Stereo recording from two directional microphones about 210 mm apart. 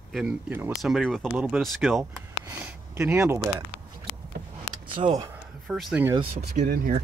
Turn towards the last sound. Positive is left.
turn(degrees=-40)  # may be behind; listen again after turning